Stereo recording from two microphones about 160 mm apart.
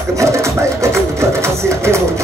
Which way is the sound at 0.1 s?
20° right (ahead or behind).